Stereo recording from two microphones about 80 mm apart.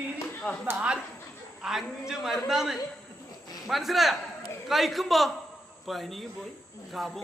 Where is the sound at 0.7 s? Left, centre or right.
Centre.